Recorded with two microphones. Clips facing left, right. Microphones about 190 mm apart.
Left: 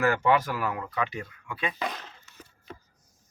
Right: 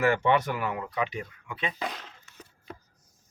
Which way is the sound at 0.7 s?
15° right (ahead or behind).